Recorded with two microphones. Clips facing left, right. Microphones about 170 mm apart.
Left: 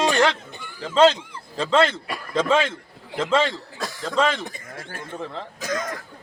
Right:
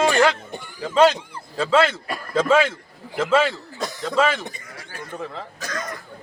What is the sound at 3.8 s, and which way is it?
Chuckle, 20° right (ahead or behind).